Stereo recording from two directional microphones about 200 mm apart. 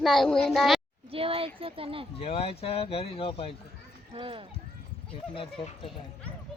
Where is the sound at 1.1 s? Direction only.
30° right (ahead or behind).